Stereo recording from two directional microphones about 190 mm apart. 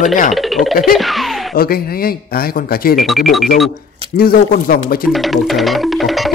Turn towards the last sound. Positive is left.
turn(degrees=0)  # may be behind; listen again after turning